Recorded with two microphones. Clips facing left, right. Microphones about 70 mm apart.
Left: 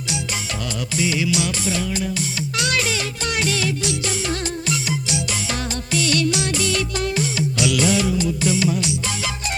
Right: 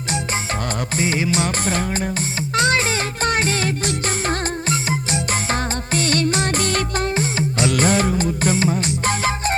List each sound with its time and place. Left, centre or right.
0.9 s music: right